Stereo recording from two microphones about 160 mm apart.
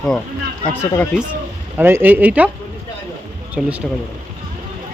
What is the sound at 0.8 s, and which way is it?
Speech, 10° left (ahead or behind).